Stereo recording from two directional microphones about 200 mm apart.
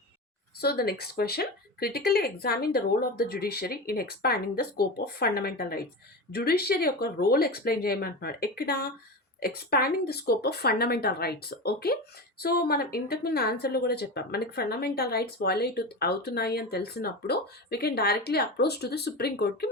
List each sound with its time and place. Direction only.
0.6 s speech: 50° left (ahead or behind)